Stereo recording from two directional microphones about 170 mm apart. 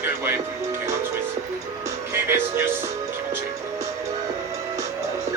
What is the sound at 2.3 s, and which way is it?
Music, 15° right (ahead or behind).